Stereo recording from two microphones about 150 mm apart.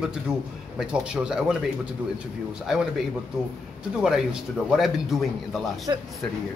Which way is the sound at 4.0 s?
5° right (ahead or behind).